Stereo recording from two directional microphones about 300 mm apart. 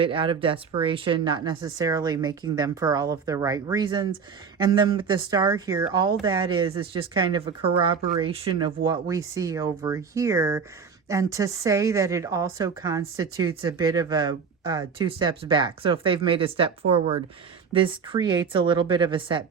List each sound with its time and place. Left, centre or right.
0.0 s a woman's voice: centre